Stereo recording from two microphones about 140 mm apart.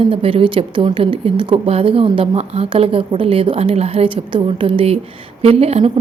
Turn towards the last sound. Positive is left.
turn(degrees=-45)  # may be behind; listen again after turning